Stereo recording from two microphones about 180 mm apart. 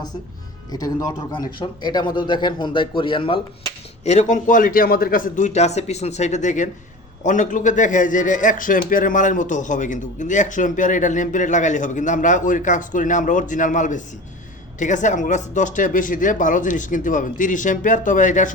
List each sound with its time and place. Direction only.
0.7 s a man's voice: 20° left (ahead or behind)
4.0 s a man's voice: 40° left (ahead or behind)